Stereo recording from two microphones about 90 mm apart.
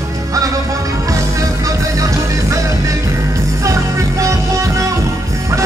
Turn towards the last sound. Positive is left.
turn(degrees=-35)  # may be behind; listen again after turning